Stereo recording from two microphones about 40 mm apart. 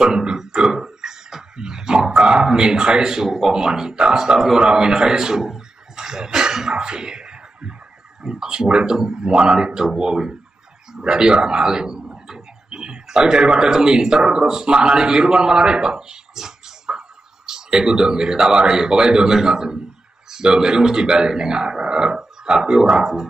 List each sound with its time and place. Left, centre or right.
0.0 s a sound: centre
3.3 s speech: centre
3.5 s a man's voice: centre